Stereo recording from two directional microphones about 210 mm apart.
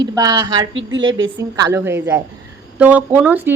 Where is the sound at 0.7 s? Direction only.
65° right (ahead or behind).